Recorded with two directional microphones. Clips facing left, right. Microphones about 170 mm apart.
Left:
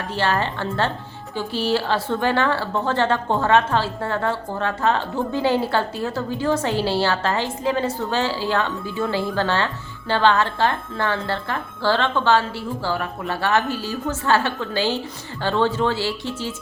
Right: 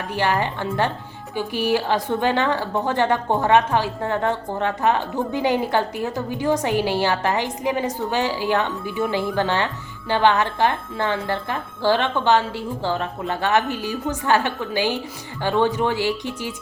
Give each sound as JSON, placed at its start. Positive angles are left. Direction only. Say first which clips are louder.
{"t": 0.1, "sound": "speech", "louder": "right 1 dB", "side_deg": -15}